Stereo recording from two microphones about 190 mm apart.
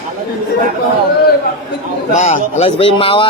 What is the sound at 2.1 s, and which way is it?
Speech, 35° left (ahead or behind).